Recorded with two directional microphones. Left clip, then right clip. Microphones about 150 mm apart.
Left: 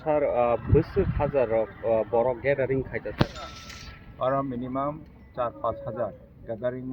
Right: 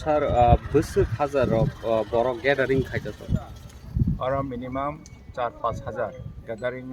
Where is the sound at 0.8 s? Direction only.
55° right (ahead or behind).